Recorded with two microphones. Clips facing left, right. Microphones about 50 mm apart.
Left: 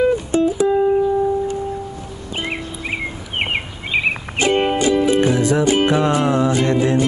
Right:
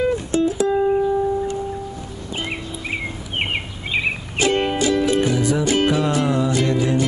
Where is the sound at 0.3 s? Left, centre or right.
Centre.